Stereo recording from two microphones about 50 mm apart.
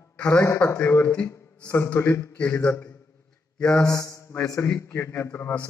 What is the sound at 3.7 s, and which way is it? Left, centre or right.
Mantra, left.